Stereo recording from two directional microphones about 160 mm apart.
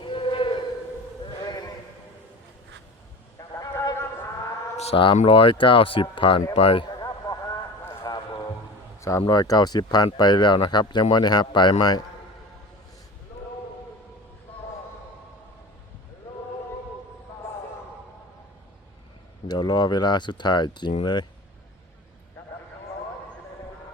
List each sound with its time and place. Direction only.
0.0 s chant: 30° left (ahead or behind)
1.4 s sheep: 25° left (ahead or behind)
3.3 s clip-clop: 20° left (ahead or behind)
4.8 s a sound: 35° left (ahead or behind)
5.1 s speech: 35° left (ahead or behind)
6.4 s a sound: 40° left (ahead or behind)
9.0 s speech: 20° left (ahead or behind)
19.5 s speech: 25° left (ahead or behind)